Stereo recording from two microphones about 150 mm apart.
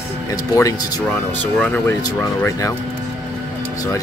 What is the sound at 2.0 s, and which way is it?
Speech, 20° left (ahead or behind).